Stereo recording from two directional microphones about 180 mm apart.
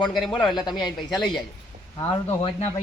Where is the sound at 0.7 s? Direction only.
Centre (ahead or behind).